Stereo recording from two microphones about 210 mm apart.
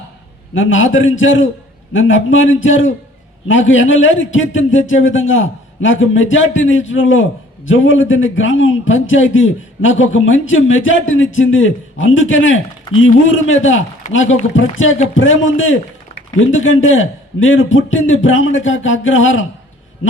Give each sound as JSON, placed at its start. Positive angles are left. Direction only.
{"t": 0.5, "sound": "a man's voice", "side_deg": 65}